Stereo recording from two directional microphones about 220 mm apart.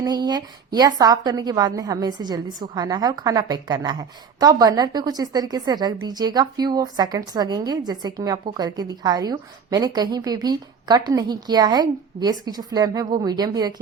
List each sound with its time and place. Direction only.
0.0 s a woman's voice: 20° right (ahead or behind)